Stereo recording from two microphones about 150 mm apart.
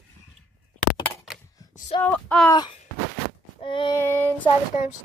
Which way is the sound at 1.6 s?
25° left (ahead or behind).